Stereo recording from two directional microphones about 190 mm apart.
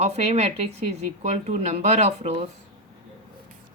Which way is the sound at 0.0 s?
35° right (ahead or behind).